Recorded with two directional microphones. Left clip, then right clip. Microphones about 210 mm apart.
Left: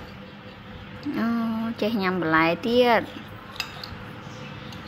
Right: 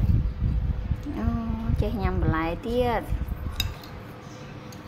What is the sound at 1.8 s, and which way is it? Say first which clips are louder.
Speech: left 5 dB; 15° left (ahead or behind).